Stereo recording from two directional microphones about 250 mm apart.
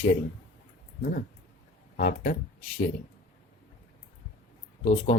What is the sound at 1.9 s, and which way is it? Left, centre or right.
Speech, left.